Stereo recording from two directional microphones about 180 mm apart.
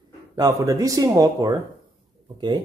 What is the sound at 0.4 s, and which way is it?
Speech, 20° right (ahead or behind).